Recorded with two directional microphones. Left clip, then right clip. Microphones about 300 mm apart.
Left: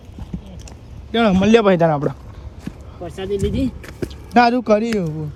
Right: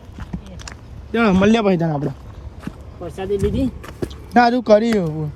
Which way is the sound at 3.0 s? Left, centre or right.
Centre.